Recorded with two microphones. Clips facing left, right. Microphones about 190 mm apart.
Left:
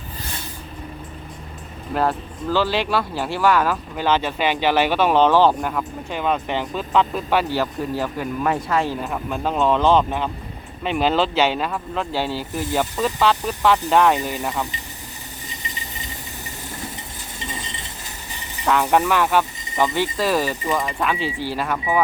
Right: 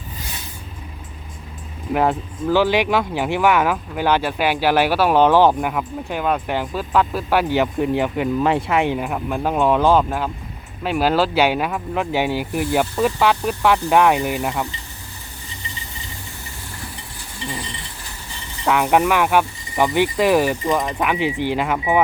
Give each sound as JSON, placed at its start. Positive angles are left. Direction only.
{"t": 1.9, "sound": "speech", "side_deg": -15}
{"t": 7.5, "sound": "speech", "side_deg": -20}
{"t": 9.0, "sound": "speech", "side_deg": -10}
{"t": 15.4, "sound": "a sound", "side_deg": 15}
{"t": 17.4, "sound": "chink", "side_deg": 20}
{"t": 18.6, "sound": "speech", "side_deg": -15}